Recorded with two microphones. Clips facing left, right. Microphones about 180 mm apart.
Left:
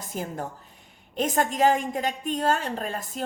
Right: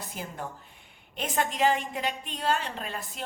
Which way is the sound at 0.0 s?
45° left (ahead or behind).